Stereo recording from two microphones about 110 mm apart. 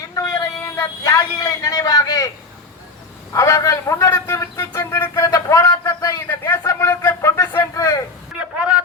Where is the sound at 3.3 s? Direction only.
30° left (ahead or behind).